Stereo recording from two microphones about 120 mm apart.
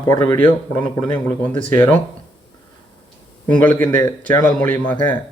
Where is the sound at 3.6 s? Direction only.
15° left (ahead or behind).